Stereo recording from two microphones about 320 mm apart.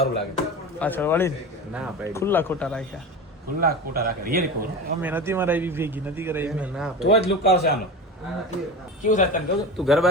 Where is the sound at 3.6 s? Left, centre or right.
Right.